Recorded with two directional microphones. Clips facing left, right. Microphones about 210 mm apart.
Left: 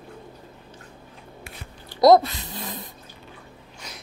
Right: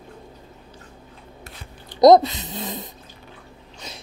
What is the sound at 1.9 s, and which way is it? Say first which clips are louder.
Speech: right 3 dB; 20° right (ahead or behind).